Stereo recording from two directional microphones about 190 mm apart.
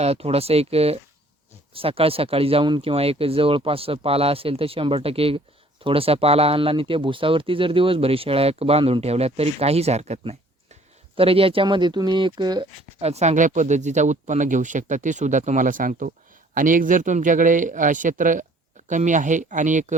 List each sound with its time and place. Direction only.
0.0 s speech: 30° right (ahead or behind)